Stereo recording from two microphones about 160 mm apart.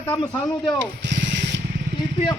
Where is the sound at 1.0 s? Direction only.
90° right.